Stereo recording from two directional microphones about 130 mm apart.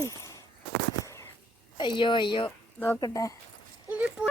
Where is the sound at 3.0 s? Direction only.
25° left (ahead or behind).